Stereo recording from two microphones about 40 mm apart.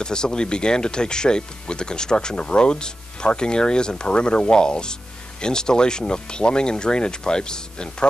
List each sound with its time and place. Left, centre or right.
0.0 s speech: centre